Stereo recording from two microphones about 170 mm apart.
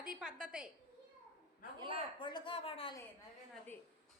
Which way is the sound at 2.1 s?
30° left (ahead or behind).